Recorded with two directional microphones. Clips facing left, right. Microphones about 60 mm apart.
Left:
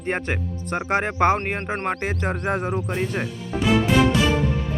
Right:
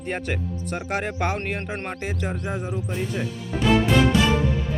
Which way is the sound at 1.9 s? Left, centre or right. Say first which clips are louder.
Left 4 dB; left.